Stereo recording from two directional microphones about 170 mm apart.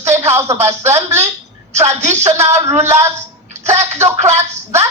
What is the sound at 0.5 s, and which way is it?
Speech, 40° right (ahead or behind).